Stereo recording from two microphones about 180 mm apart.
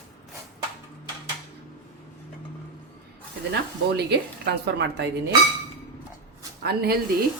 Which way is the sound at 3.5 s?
65° right (ahead or behind).